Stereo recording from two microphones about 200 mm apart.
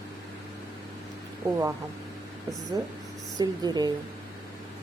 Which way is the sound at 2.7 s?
20° right (ahead or behind).